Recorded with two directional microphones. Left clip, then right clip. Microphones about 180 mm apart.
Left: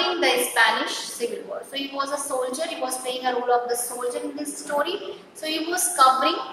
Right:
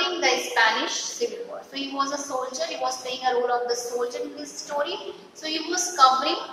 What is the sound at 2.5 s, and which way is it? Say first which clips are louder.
A woman's voice: even; 15° left (ahead or behind).